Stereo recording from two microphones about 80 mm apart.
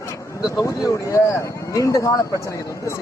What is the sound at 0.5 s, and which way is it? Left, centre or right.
Speech, left.